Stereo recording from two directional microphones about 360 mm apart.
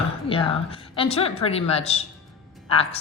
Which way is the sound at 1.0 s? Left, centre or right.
Centre.